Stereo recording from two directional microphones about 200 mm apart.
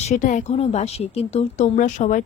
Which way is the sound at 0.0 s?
40° left (ahead or behind).